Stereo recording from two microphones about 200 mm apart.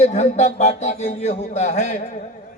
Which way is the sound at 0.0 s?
35° left (ahead or behind).